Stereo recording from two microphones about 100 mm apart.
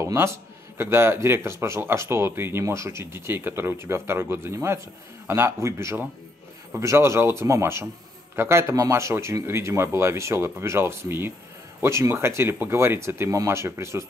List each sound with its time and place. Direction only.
0.0 s a man's voice: 30° right (ahead or behind)